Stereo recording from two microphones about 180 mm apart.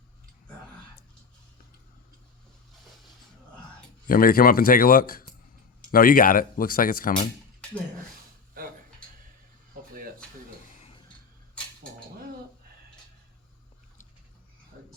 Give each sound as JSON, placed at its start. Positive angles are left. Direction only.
{"t": 4.0, "sound": "speech", "side_deg": 50}